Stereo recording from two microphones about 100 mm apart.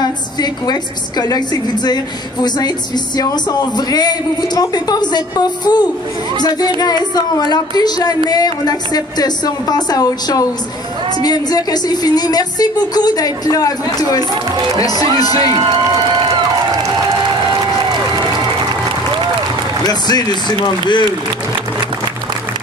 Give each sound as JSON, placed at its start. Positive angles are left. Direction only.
{"t": 0.0, "sound": "a man's voice", "side_deg": 45}
{"t": 3.2, "sound": "a man's voice", "side_deg": 45}
{"t": 15.5, "sound": "a sound", "side_deg": -50}
{"t": 19.8, "sound": "a man's voice", "side_deg": 45}